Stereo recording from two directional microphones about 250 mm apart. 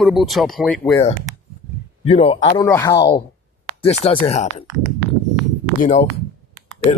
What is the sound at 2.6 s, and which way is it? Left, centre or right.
Speech, centre.